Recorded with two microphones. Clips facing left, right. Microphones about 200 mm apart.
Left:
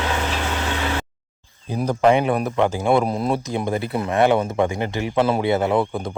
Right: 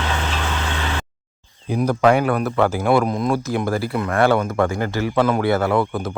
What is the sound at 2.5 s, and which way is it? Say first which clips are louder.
Speech: right 1 dB; 20° left (ahead or behind).